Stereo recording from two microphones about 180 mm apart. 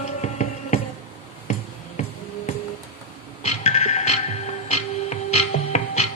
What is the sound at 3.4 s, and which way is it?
Music, 40° left (ahead or behind).